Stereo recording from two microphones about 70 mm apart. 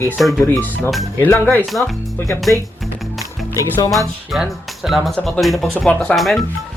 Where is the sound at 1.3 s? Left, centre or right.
Left.